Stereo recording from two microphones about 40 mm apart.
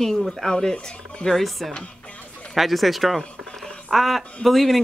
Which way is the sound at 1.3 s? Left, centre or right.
Centre.